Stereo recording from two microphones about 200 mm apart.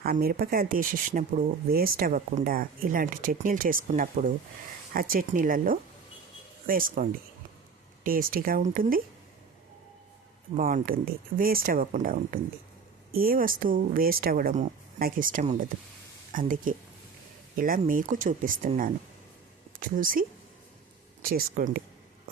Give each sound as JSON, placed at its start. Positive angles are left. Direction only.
{"t": 0.0, "sound": "speech", "side_deg": -50}
{"t": 10.6, "sound": "speech", "side_deg": -45}
{"t": 19.8, "sound": "speech", "side_deg": -45}